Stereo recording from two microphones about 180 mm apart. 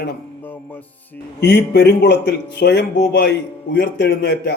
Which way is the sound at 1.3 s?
65° left (ahead or behind).